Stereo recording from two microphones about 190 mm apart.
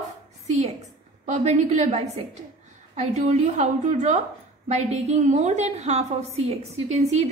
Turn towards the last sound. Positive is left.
turn(degrees=-35)  # may be behind; listen again after turning